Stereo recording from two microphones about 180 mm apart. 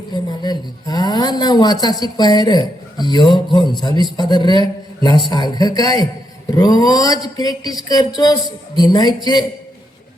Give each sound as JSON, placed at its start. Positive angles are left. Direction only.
{"t": 0.1, "sound": "speech", "side_deg": 25}